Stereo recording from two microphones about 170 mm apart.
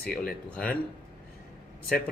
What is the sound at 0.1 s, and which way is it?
Speech, 5° left (ahead or behind).